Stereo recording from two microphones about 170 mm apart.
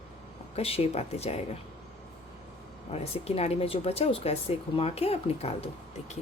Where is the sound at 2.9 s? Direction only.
35° left (ahead or behind).